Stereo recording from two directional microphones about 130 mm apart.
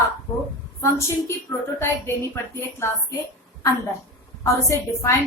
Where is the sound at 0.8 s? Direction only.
20° left (ahead or behind).